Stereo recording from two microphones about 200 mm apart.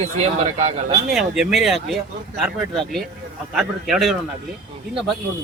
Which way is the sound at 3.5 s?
Centre (ahead or behind).